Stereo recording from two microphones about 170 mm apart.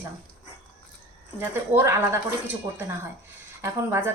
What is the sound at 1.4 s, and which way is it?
Speech, 15° right (ahead or behind).